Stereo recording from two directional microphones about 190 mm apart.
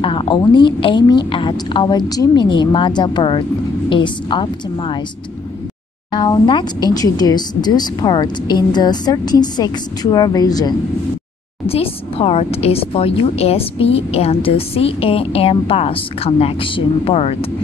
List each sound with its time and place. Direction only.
0.0 s speech: 30° left (ahead or behind)
6.1 s speech: 25° left (ahead or behind)
11.6 s speech: 30° left (ahead or behind)